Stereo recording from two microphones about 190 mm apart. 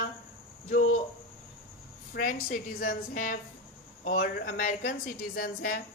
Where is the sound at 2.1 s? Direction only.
50° left (ahead or behind).